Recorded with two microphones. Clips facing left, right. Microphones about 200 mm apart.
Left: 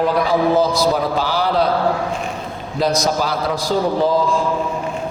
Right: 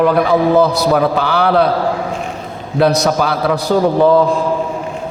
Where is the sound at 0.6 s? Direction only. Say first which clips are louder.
Right 4 dB; 60° right (ahead or behind).